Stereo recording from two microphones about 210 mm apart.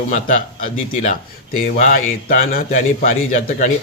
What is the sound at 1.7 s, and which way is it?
A man's voice, 40° left (ahead or behind).